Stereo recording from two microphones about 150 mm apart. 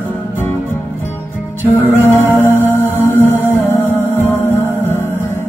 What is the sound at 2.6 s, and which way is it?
Music, 15° left (ahead or behind).